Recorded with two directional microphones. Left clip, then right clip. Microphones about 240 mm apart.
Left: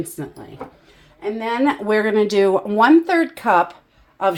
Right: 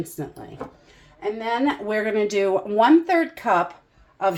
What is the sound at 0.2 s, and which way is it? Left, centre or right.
Speech, left.